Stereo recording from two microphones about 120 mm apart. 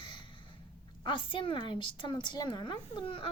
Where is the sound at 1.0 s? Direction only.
45° left (ahead or behind).